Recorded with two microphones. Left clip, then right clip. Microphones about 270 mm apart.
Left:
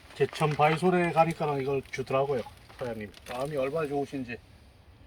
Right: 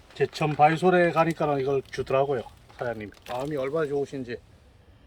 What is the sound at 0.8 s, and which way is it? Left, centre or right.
Speech, centre.